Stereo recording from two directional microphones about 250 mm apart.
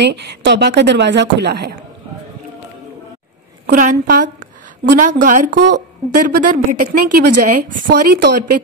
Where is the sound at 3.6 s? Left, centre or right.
Right.